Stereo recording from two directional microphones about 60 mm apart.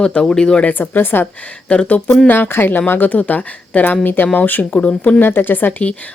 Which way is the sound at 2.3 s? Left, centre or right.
Left.